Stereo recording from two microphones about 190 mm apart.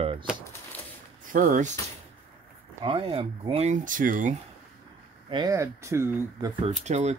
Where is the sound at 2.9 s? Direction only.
30° right (ahead or behind); by 4.3 s 45° right (ahead or behind).